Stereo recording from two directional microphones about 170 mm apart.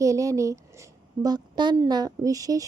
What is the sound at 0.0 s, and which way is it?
A woman's voice, 20° right (ahead or behind).